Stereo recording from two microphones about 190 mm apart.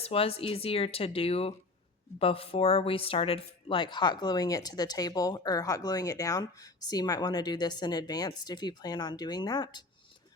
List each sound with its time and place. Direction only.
0.0 s speech: 30° left (ahead or behind)